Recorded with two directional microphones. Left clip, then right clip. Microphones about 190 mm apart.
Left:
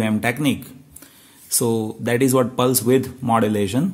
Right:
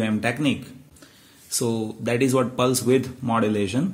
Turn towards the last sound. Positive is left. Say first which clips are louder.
# left 3 dB
turn(degrees=35)  # may be behind; listen again after turning